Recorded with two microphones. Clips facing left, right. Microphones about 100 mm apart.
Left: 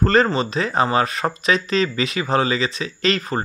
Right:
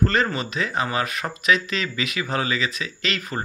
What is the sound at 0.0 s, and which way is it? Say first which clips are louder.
Speech: left 5 dB; 35° left (ahead or behind).